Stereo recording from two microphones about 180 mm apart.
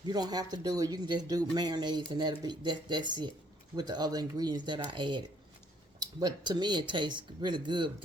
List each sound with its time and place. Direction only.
0.0 s speech: 20° right (ahead or behind)